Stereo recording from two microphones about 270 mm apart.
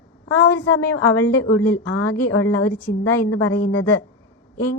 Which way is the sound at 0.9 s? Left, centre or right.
Left.